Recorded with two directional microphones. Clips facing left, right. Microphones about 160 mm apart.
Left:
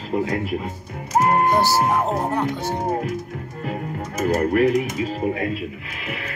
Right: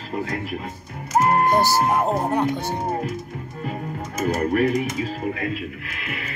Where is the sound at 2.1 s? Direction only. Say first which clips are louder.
Right 1 dB; 15° right (ahead or behind).